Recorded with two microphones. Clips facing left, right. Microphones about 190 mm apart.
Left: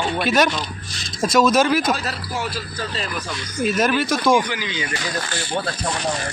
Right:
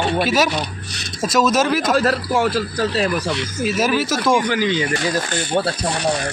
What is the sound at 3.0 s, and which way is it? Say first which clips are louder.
Speech: right 8 dB; 70° right (ahead or behind).